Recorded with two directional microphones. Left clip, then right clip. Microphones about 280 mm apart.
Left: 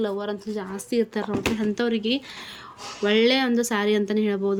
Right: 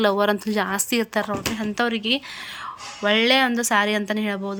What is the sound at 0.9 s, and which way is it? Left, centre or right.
Speech, centre.